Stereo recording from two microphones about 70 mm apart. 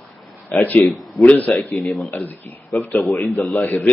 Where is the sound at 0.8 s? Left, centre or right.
Centre.